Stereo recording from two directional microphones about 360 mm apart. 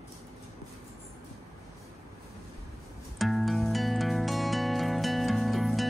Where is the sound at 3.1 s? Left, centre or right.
Centre.